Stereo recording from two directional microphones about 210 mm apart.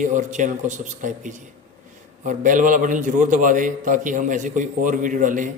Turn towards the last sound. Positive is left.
turn(degrees=-40)  # may be behind; listen again after turning